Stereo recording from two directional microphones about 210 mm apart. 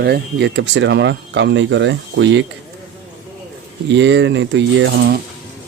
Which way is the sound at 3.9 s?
55° right (ahead or behind).